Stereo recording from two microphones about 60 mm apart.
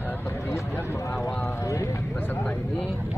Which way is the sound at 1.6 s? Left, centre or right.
Left.